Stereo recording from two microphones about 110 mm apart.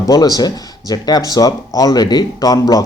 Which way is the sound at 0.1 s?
35° left (ahead or behind).